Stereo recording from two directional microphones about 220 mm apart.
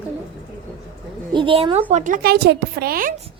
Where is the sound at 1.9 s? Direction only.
35° right (ahead or behind).